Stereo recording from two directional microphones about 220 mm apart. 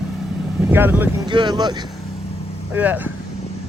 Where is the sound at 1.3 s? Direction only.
20° right (ahead or behind).